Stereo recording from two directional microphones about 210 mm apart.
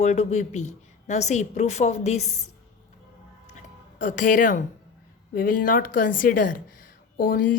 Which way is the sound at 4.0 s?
35° left (ahead or behind).